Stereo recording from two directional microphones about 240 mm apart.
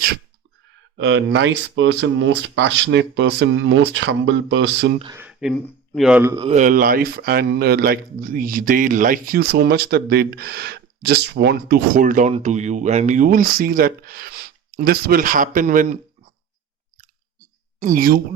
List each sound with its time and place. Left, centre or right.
0.9 s speech: right
5.1 s a man's voice: centre
6.3 s speech: right
17.7 s speech: right